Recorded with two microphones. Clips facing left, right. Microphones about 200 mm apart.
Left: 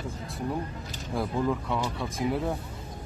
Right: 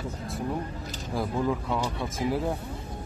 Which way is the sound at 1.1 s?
Centre (ahead or behind).